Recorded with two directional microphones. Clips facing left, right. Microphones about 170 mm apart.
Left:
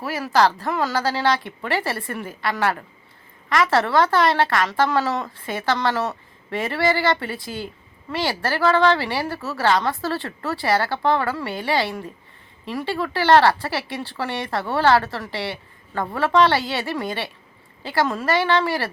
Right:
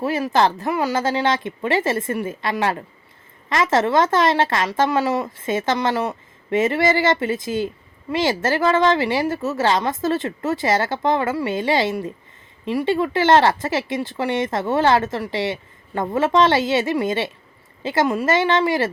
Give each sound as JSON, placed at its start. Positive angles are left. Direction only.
{"t": 0.0, "sound": "a woman's voice", "side_deg": -25}